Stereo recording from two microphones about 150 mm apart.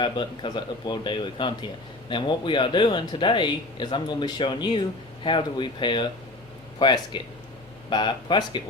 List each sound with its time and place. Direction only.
0.0 s speech: 30° left (ahead or behind)